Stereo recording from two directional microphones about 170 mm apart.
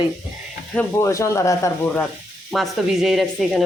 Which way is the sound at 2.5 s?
Centre (ahead or behind).